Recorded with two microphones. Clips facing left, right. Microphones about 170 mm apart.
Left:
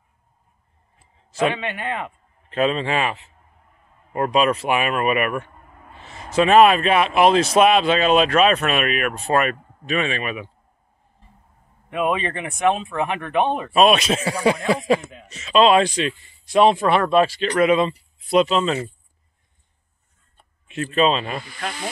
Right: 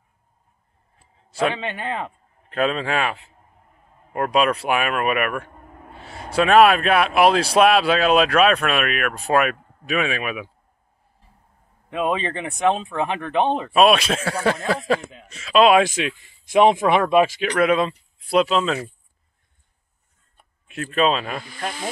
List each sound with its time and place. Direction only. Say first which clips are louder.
1.5 s a man's voice: left 1 dB; 30° right (ahead or behind)
2.5 s speech: left 1 dB; centre (ahead or behind)
6.4 s speech: left 1 dB; centre (ahead or behind)
11.9 s speech: left 1 dB; 30° right (ahead or behind)
13.7 s speech: even; centre (ahead or behind)
15.6 s speech: even; 10° right (ahead or behind)
20.3 s speech: left 3 dB; centre (ahead or behind)